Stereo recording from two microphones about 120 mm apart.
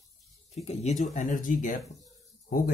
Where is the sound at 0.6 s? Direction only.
80° left.